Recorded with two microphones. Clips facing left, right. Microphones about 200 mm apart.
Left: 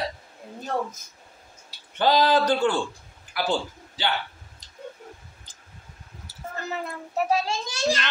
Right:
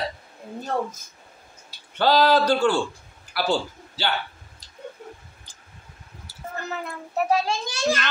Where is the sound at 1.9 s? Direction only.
15° left (ahead or behind).